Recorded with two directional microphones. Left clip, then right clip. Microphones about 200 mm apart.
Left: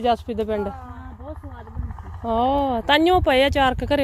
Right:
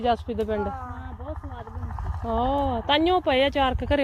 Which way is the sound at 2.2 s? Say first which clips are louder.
Left 4 dB; 40° left (ahead or behind).